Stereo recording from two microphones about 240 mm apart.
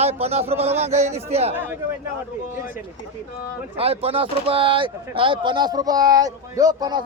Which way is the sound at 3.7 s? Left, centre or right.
Right.